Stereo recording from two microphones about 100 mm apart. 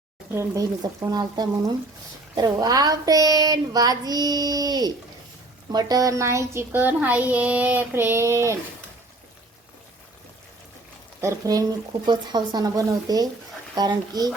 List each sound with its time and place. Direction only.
0.3 s a child's voice: 35° right (ahead or behind)
11.2 s speech: 35° right (ahead or behind)
12.0 s speech: 45° right (ahead or behind)